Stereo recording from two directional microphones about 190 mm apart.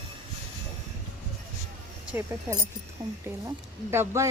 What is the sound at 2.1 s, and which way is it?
Speech, 10° right (ahead or behind).